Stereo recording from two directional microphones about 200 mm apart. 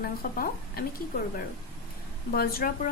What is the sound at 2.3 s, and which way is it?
Speech, 50° left (ahead or behind).